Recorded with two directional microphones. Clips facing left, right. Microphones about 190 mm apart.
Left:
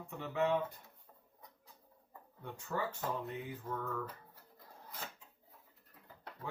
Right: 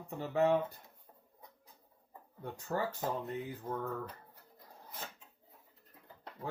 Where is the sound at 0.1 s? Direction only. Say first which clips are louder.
Right 4 dB; 40° right (ahead or behind).